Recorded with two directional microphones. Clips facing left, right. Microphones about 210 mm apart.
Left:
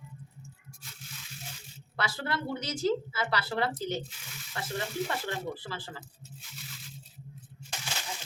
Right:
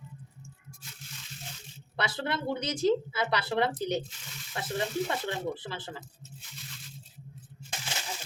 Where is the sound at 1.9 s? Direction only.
20° right (ahead or behind).